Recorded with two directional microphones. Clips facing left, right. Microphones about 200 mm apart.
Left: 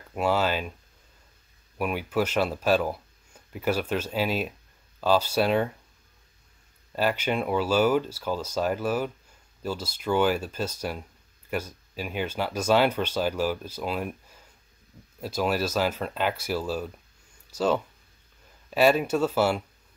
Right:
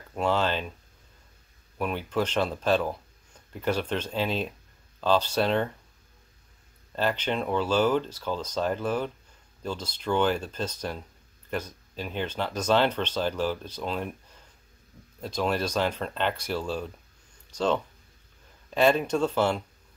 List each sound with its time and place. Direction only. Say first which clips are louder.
0.1 s speech: left 1 dB; 10° left (ahead or behind)
1.8 s speech: left 1 dB; 10° left (ahead or behind)
7.0 s speech: left 2 dB; 10° left (ahead or behind)